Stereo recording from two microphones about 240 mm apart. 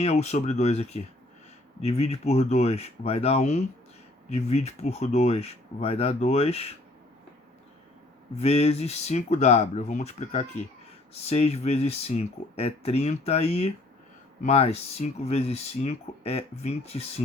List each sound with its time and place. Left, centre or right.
0.0 s speech: left
8.4 s speech: left